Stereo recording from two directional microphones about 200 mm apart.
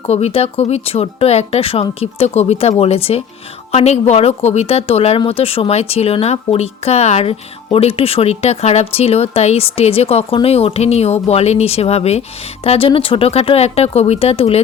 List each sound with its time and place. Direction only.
0.1 s speech: 30° left (ahead or behind)